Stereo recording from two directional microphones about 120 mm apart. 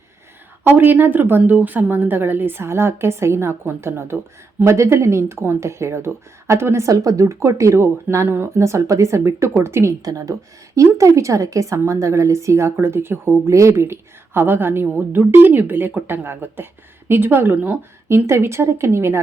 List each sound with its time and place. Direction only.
0.6 s a woman's voice: 15° right (ahead or behind)